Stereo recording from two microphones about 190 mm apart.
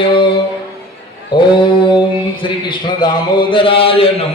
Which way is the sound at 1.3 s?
25° left (ahead or behind).